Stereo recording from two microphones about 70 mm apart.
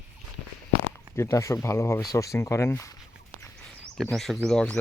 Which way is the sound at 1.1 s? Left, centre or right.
Left.